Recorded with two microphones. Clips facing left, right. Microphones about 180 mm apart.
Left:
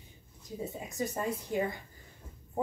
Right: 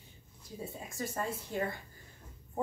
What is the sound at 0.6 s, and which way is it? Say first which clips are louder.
A woman's voice: left 4 dB; 20° left (ahead or behind).